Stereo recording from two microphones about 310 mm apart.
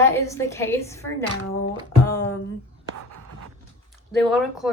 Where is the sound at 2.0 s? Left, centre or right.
Centre.